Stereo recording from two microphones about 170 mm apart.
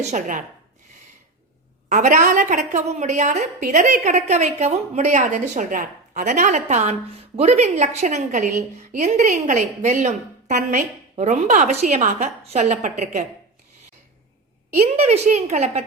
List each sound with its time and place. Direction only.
0.0 s a woman's voice: 45° right (ahead or behind)
1.9 s a woman's voice: 45° right (ahead or behind)
14.9 s a woman's voice: 40° right (ahead or behind)